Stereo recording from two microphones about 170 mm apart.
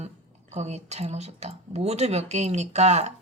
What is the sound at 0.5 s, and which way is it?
Speech, 40° right (ahead or behind).